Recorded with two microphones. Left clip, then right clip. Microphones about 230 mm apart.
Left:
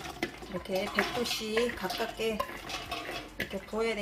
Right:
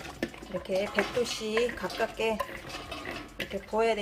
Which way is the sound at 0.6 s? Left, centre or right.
Centre.